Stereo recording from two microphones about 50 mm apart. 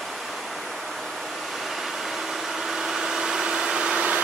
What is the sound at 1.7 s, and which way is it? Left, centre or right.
Vehicle, centre.